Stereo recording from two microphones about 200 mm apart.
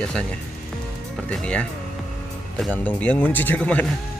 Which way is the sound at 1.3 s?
5° left (ahead or behind).